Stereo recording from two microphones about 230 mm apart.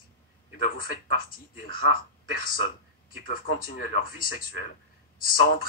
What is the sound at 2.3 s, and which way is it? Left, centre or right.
Speech, left.